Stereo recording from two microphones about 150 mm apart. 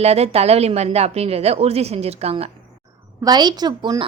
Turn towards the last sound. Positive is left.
turn(degrees=-30)  # may be behind; listen again after turning